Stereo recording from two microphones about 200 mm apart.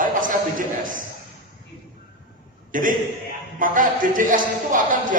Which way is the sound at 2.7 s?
40° right (ahead or behind).